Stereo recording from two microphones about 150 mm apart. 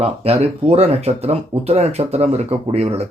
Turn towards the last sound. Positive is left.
turn(degrees=-45)  # may be behind; listen again after turning